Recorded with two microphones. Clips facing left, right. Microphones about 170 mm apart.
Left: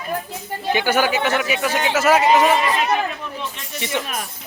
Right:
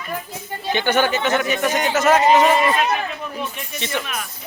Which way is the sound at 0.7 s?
5° left (ahead or behind).